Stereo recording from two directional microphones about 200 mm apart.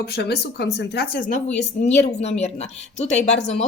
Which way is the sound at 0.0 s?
55° left (ahead or behind).